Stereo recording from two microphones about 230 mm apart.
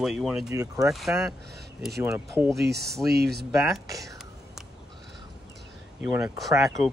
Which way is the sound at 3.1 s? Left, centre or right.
Right.